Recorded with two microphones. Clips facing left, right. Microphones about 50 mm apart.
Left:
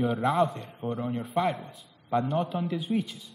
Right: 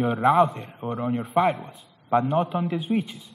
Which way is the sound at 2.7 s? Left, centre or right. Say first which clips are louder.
Right 4 dB; right.